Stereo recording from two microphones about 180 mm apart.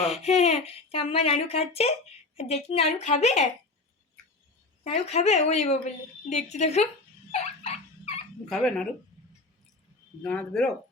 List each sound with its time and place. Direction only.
0.2 s speech: 35° left (ahead or behind)
4.8 s speech: 40° left (ahead or behind)
7.3 s fowl: 35° left (ahead or behind)
8.4 s speech: centre (ahead or behind)
10.2 s speech: 5° left (ahead or behind)